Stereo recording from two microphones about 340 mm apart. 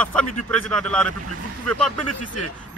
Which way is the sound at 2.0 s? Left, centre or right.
Left.